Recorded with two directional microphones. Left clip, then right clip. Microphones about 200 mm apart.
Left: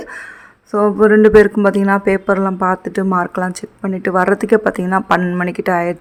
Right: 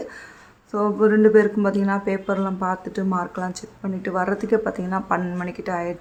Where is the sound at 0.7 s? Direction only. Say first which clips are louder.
Left 8 dB; 35° left (ahead or behind).